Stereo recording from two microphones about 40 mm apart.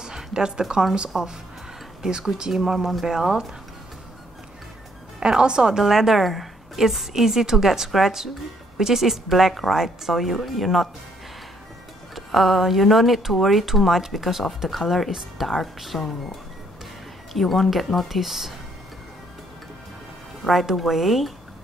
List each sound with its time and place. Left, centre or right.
0.0 s a sound: centre
1.1 s a woman's voice: centre
2.0 s speech: centre
2.5 s a woman's voice: centre
5.2 s a woman's voice: right; by 10.9 s centre
12.3 s a woman's voice: centre
17.3 s a woman's voice: centre
20.7 s a woman's voice: centre